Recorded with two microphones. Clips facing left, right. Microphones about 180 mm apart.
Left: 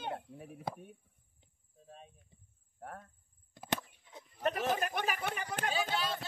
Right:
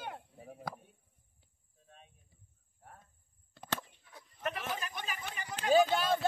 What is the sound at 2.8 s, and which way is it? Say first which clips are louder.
Cricket: left 10 dB; 75° left (ahead or behind).